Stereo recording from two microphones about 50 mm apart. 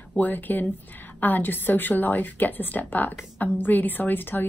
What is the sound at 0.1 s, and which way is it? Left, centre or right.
A woman's voice, left.